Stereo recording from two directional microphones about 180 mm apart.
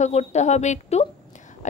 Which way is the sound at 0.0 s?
40° left (ahead or behind).